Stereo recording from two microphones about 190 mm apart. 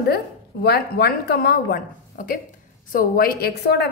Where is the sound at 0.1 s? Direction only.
55° left (ahead or behind).